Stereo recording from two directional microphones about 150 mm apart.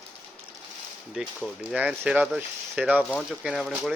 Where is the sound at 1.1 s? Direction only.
5° right (ahead or behind).